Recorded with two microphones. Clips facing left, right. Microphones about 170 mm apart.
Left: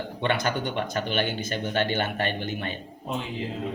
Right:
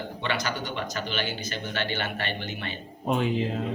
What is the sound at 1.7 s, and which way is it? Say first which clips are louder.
Speech: left 5 dB; 45° left (ahead or behind).